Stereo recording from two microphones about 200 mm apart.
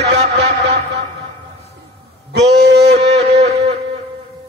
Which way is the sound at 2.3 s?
60° right (ahead or behind).